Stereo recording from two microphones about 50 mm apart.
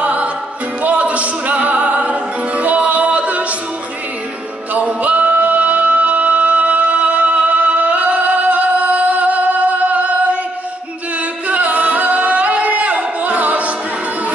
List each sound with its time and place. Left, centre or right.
0.0 s music: right
4.7 s music: right
11.4 s singing: right